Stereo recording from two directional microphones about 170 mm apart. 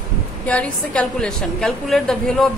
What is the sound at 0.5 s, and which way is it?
A woman's voice, 5° left (ahead or behind).